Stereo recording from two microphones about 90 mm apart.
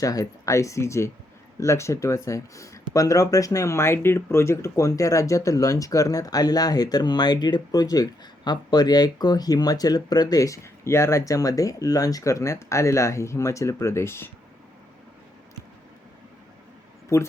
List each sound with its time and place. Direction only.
0.0 s speech: 40° left (ahead or behind)
17.1 s speech: 30° left (ahead or behind)